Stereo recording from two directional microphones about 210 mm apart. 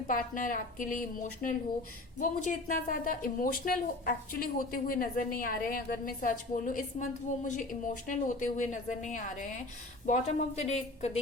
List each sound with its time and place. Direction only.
0.1 s speech: 40° left (ahead or behind)